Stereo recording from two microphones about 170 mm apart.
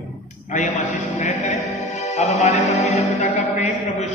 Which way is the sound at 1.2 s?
45° left (ahead or behind).